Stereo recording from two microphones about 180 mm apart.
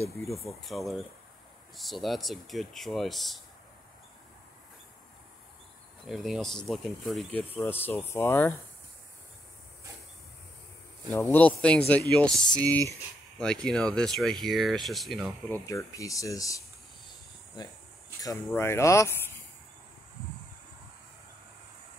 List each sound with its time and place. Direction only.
0.5 s speech: centre (ahead or behind)
6.0 s speech: centre (ahead or behind)
11.1 s speech: 10° left (ahead or behind)
15.5 s speech: 20° left (ahead or behind)